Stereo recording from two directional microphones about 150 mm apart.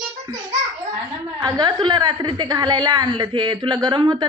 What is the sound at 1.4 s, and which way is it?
A woman's voice, 30° right (ahead or behind).